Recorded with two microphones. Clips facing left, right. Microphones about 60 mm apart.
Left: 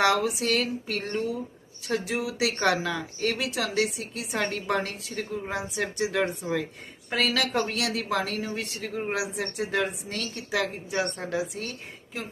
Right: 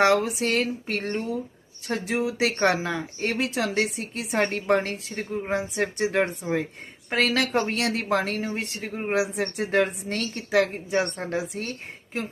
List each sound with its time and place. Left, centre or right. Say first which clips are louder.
0.0 s speech: right 3 dB; right